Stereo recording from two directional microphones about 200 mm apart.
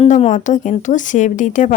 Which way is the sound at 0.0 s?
30° left (ahead or behind).